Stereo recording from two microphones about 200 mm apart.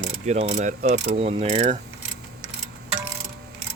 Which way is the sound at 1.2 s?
30° right (ahead or behind).